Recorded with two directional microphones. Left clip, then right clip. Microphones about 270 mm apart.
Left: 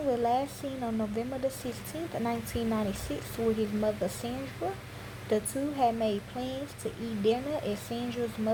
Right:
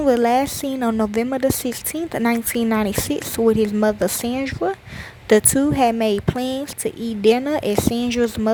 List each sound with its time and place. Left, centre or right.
0.1 s a woman's voice: right